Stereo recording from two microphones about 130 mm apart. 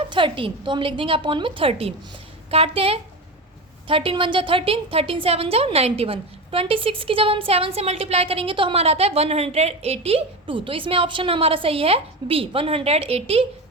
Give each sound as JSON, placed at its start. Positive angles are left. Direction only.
{"t": 0.1, "sound": "a woman's voice", "side_deg": -40}